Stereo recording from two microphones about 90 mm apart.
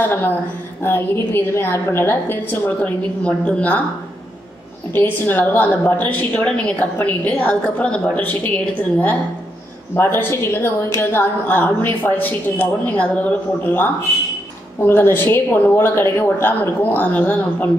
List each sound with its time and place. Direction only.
0.1 s a woman's voice: 20° left (ahead or behind)
4.9 s a woman's voice: 25° left (ahead or behind)